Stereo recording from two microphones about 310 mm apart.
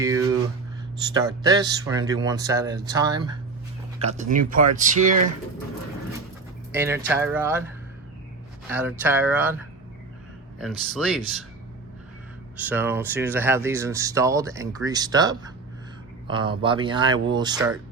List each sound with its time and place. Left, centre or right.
0.0 s a sound: centre
1.1 s speech: centre
4.0 s speech: right
6.7 s speech: centre
8.7 s speech: centre
10.6 s speech: centre
12.5 s speech: centre